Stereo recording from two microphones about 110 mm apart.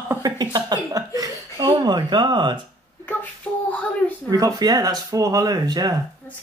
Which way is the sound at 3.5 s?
15° left (ahead or behind).